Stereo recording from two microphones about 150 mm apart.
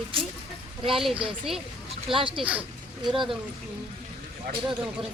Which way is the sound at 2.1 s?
35° right (ahead or behind).